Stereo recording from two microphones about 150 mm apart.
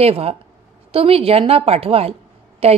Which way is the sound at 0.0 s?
40° right (ahead or behind).